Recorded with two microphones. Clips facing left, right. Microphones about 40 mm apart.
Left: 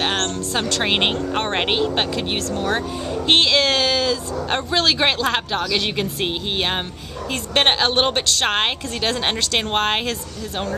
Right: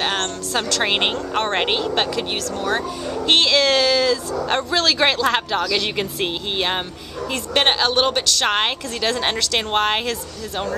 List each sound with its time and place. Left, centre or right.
0.6 s speech: centre
7.5 s speech: left
8.5 s speech: centre